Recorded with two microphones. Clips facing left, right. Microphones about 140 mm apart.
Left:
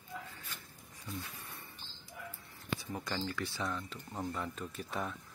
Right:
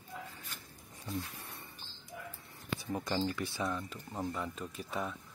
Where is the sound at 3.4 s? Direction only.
15° right (ahead or behind).